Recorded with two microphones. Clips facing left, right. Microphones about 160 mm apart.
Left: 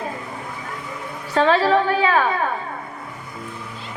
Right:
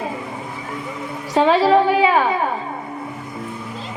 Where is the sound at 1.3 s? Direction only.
15° right (ahead or behind).